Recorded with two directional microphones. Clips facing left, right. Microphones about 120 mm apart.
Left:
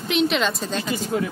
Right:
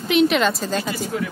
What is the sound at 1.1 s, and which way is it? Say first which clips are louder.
Speech: left 3 dB; 30° left (ahead or behind).